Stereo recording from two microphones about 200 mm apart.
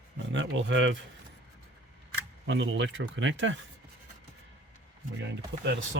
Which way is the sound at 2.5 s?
65° right (ahead or behind).